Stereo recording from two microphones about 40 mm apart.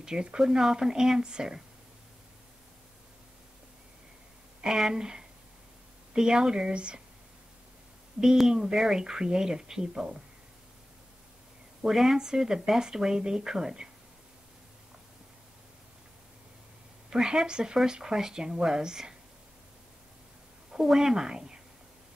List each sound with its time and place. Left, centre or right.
0.0 s speech: centre
4.6 s speech: centre
8.5 s speech: centre
11.8 s speech: centre
17.1 s speech: centre
20.7 s speech: centre